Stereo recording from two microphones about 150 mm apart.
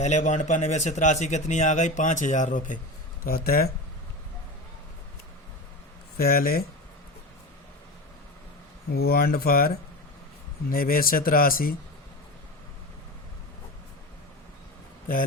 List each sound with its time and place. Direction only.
0.0 s speech: 50° left (ahead or behind)
3.2 s speech: 85° left
6.1 s speech: 85° left
8.9 s speech: 90° left; by 11.7 s 75° left (ahead or behind)